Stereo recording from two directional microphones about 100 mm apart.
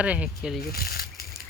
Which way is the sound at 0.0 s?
15° right (ahead or behind).